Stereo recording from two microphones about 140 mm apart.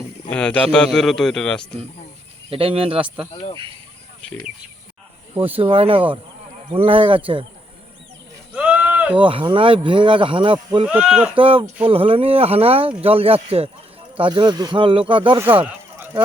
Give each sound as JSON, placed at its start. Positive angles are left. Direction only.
{"t": 0.3, "sound": "speech", "side_deg": 10}
{"t": 2.5, "sound": "speech", "side_deg": -40}
{"t": 5.5, "sound": "speech", "side_deg": -40}
{"t": 8.5, "sound": "sheep", "side_deg": -10}
{"t": 9.2, "sound": "speech", "side_deg": -35}
{"t": 10.8, "sound": "speech", "side_deg": -10}
{"t": 11.3, "sound": "speech", "side_deg": -40}
{"t": 15.4, "sound": "speech", "side_deg": -10}